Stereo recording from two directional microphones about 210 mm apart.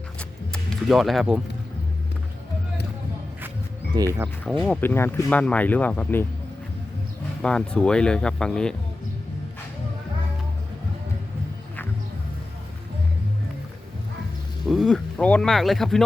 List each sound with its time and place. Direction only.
0.2 s music: 5° left (ahead or behind)
3.9 s speech: 15° right (ahead or behind)
4.6 s speech: 5° left (ahead or behind)
7.4 s speech: 5° left (ahead or behind)
14.7 s speech: centre (ahead or behind)